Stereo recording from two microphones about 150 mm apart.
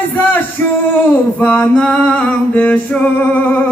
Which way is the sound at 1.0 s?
10° left (ahead or behind).